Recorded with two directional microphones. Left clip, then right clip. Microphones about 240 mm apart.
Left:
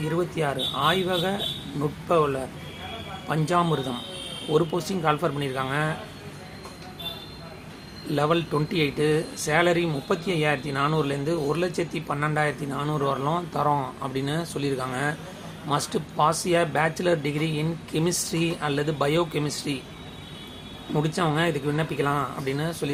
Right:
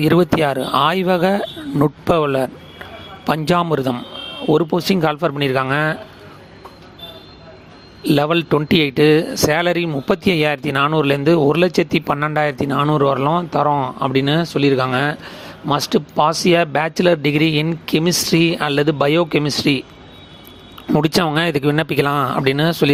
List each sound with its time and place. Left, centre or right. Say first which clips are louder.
0.1 s speech: right 8 dB; right
8.1 s speech: right 8 dB; right
20.9 s speech: right 9 dB; right